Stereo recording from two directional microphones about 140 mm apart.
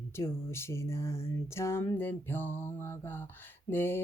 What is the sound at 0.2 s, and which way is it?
Music, 20° left (ahead or behind).